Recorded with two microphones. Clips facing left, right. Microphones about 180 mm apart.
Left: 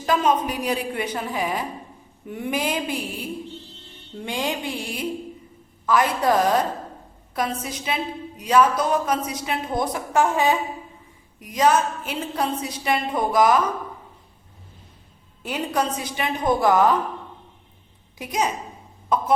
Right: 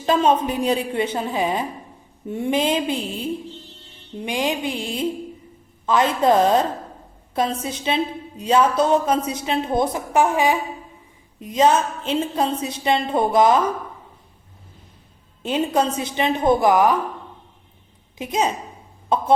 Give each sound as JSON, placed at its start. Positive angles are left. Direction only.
{"t": 0.0, "sound": "a woman's voice", "side_deg": -25}
{"t": 11.3, "sound": "a woman's voice", "side_deg": -25}
{"t": 15.4, "sound": "a woman's voice", "side_deg": -25}
{"t": 18.2, "sound": "a woman's voice", "side_deg": -25}